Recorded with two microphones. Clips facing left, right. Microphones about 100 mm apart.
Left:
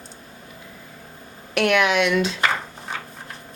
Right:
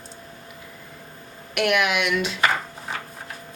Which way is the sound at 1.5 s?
35° left (ahead or behind).